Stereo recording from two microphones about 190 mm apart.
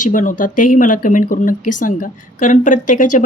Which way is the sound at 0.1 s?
45° left (ahead or behind).